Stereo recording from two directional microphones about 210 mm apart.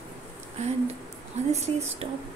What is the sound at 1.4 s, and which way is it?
Speech, 35° right (ahead or behind).